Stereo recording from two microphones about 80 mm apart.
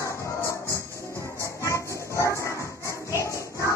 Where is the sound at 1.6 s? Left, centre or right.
Left.